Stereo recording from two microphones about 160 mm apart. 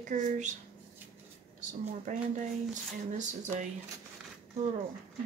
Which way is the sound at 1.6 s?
50° right (ahead or behind).